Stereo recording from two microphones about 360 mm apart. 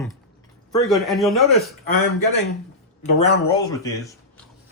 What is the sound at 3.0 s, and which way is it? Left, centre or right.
Speech, centre.